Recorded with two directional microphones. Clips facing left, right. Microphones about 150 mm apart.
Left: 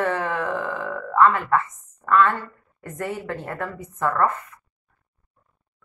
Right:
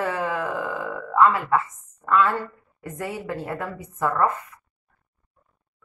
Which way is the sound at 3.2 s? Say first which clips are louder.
Right 1 dB; 20° right (ahead or behind).